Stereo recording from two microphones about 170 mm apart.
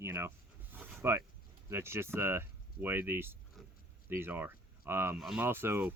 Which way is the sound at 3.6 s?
Centre (ahead or behind).